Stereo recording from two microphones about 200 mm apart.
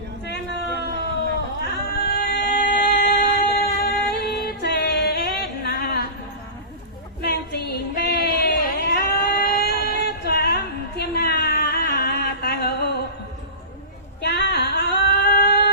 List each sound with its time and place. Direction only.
1.6 s singing: 55° left (ahead or behind)
7.2 s a sound: 55° left (ahead or behind)
14.2 s female singing: 55° left (ahead or behind)